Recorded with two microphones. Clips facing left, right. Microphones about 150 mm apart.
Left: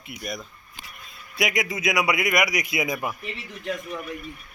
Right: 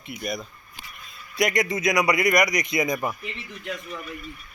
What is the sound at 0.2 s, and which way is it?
A man's voice, centre (ahead or behind).